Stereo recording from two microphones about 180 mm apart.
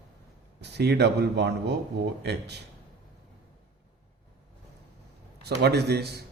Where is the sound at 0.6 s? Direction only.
70° right (ahead or behind).